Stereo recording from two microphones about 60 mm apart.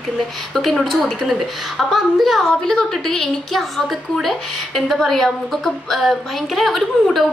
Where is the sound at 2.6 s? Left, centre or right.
Centre.